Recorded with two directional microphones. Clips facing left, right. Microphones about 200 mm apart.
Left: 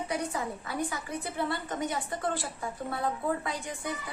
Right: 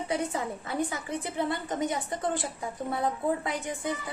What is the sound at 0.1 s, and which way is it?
A woman's voice, 25° right (ahead or behind).